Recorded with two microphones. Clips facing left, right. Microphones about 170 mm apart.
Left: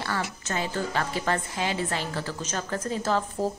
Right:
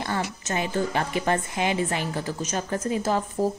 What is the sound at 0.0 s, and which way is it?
A woman's voice, 20° right (ahead or behind).